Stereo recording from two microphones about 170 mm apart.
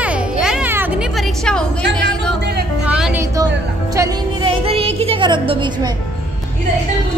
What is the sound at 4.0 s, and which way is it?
Music, 15° right (ahead or behind).